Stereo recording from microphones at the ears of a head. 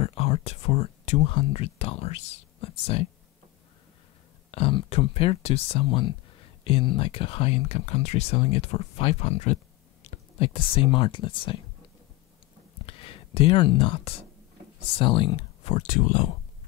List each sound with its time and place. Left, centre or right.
0.0 s speech: left
4.5 s speech: left
12.7 s a sound: left
14.8 s speech: left